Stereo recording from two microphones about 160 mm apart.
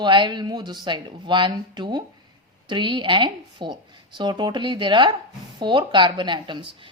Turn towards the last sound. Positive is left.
turn(degrees=-30)  # may be behind; listen again after turning